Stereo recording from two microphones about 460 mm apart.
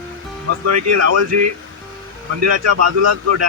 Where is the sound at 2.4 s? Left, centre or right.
Right.